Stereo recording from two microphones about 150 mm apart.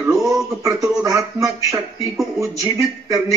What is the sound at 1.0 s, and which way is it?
Speech, 20° right (ahead or behind).